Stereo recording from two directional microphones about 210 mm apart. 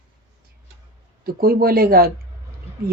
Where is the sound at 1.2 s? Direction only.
45° right (ahead or behind).